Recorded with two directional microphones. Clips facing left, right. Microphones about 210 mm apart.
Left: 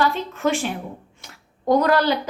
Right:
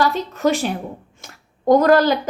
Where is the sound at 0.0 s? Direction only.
40° right (ahead or behind).